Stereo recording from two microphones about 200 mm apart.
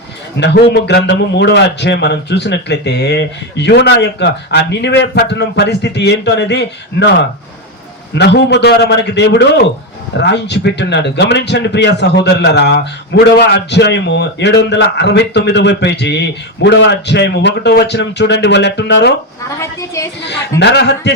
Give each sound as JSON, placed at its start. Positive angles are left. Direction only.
{"t": 0.3, "sound": "a man's voice", "side_deg": 55}
{"t": 8.2, "sound": "a man's voice", "side_deg": 55}
{"t": 19.5, "sound": "a woman's voice", "side_deg": 15}
{"t": 20.2, "sound": "a man's voice", "side_deg": 60}